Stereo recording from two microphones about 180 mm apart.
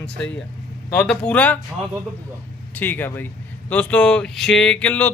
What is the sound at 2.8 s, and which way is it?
Speech, 10° left (ahead or behind).